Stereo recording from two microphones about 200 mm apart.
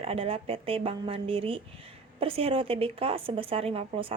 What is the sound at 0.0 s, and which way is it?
A woman's voice, 30° right (ahead or behind).